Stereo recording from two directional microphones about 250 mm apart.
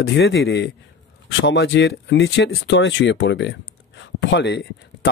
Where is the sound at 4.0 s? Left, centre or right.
Left.